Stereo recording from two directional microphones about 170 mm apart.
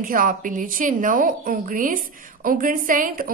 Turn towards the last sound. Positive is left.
turn(degrees=-55)  # may be behind; listen again after turning